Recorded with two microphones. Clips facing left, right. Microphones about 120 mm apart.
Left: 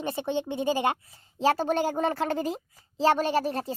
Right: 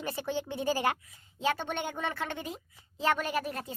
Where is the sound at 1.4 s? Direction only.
35° left (ahead or behind).